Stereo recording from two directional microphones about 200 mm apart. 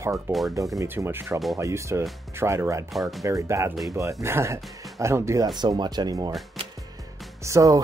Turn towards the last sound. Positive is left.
turn(degrees=-15)  # may be behind; listen again after turning